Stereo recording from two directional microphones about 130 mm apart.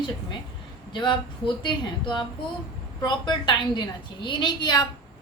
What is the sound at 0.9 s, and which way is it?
A woman's voice, 40° left (ahead or behind).